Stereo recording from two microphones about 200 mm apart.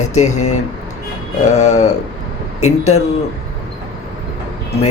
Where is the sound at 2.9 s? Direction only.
30° left (ahead or behind).